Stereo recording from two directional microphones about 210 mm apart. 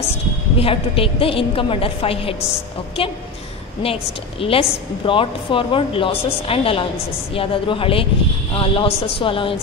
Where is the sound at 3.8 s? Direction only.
25° left (ahead or behind).